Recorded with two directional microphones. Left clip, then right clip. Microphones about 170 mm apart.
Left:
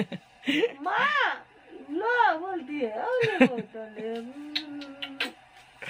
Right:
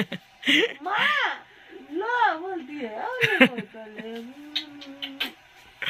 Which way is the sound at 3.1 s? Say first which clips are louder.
Right 4 dB; 5° left (ahead or behind).